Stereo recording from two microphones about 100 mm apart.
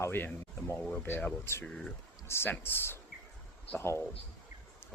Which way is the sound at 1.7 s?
5° left (ahead or behind).